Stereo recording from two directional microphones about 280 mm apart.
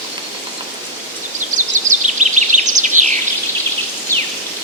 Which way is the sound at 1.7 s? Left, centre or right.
Right.